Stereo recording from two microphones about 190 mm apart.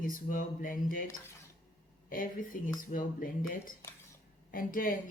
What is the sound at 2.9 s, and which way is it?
A woman's voice, 45° left (ahead or behind).